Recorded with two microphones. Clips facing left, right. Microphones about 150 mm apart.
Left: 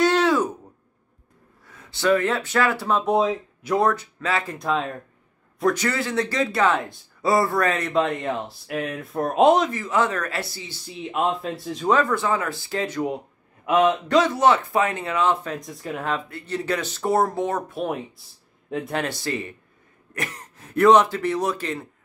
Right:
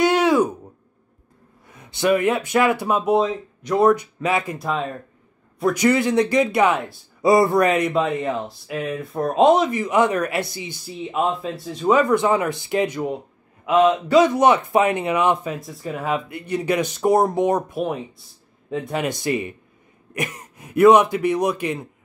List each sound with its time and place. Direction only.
0.0 s a sound: 15° right (ahead or behind)
1.7 s speech: 20° right (ahead or behind)
3.1 s speech: centre (ahead or behind)
3.8 s a man's voice: 15° right (ahead or behind)
4.6 s a man's voice: 5° right (ahead or behind)
7.9 s speech: centre (ahead or behind)
9.7 s a man's voice: 15° right (ahead or behind)
10.9 s speech: centre (ahead or behind)
11.9 s a man's voice: 15° right (ahead or behind)
13.7 s a man's voice: centre (ahead or behind)
16.3 s a man's voice: 15° right (ahead or behind)
17.8 s speech: centre (ahead or behind)
19.0 s a man's voice: 15° right (ahead or behind)